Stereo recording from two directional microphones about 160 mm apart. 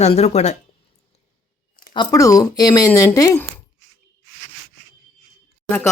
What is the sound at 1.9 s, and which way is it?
Speech, 25° left (ahead or behind).